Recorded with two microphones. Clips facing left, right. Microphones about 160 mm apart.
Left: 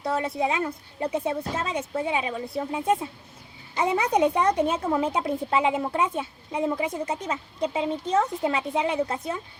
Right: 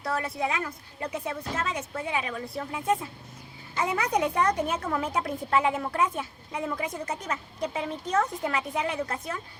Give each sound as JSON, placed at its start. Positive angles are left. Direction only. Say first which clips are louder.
{"t": 0.0, "sound": "a woman's voice", "louder": "left 4 dB", "side_deg": 25}